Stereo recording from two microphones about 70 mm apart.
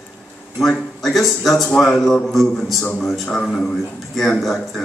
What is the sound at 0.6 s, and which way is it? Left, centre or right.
A man's voice, centre.